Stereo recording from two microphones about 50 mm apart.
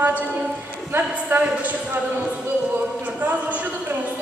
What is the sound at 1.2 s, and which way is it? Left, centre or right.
Speech, right.